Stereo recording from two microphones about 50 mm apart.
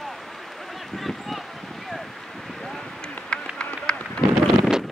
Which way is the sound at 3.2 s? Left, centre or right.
Left.